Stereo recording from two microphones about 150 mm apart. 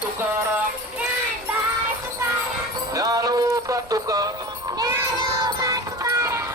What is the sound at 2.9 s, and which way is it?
Music, 25° right (ahead or behind).